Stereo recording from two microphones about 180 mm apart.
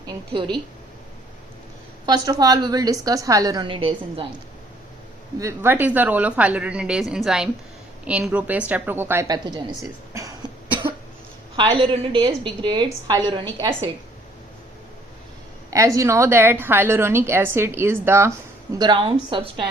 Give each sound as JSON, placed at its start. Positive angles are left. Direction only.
{"t": 0.0, "sound": "a woman's voice", "side_deg": -25}
{"t": 2.0, "sound": "a woman's voice", "side_deg": -20}
{"t": 5.4, "sound": "a woman's voice", "side_deg": -15}
{"t": 10.2, "sound": "cough", "side_deg": -25}
{"t": 11.5, "sound": "a woman's voice", "side_deg": -30}
{"t": 16.0, "sound": "a woman's voice", "side_deg": -15}
{"t": 18.8, "sound": "a woman's voice", "side_deg": -25}